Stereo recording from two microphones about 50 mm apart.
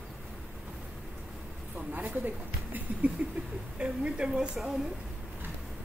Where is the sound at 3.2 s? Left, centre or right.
Right.